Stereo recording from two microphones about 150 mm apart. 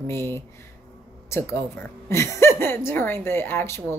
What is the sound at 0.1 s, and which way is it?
A woman's voice, 15° left (ahead or behind).